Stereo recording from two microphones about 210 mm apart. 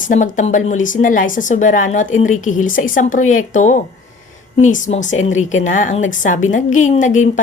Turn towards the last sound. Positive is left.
turn(degrees=35)  # may be behind; listen again after turning